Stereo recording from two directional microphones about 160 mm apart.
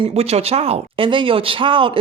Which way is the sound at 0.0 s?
40° right (ahead or behind).